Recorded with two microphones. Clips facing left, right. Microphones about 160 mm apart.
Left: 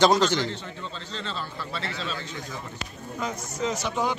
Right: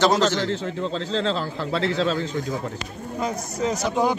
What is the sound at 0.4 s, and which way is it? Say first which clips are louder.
Speech: right 6 dB; 90° right.